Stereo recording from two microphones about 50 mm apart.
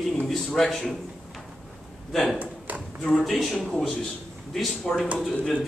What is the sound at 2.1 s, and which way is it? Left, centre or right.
Speech, centre.